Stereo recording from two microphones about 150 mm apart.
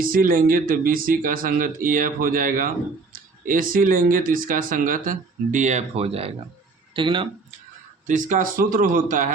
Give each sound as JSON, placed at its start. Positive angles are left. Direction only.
{"t": 0.0, "sound": "speech", "side_deg": -70}
{"t": 8.0, "sound": "speech", "side_deg": -60}